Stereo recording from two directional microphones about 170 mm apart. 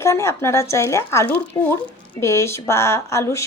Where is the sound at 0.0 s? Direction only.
15° left (ahead or behind).